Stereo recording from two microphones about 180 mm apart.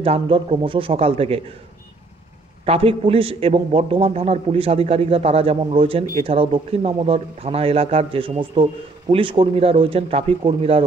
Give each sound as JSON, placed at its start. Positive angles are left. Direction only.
{"t": 0.0, "sound": "a man's voice", "side_deg": -30}
{"t": 2.6, "sound": "a man's voice", "side_deg": -30}